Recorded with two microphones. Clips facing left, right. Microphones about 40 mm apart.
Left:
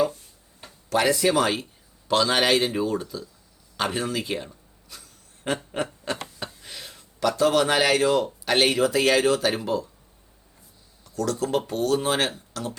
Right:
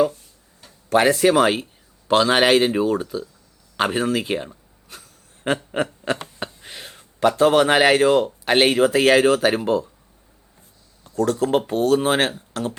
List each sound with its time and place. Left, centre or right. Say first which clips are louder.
0.9 s speech: right 5 dB; right
4.9 s a sound: right 3 dB; right
5.7 s speech: right 5 dB; right
11.0 s speech: right 6 dB; right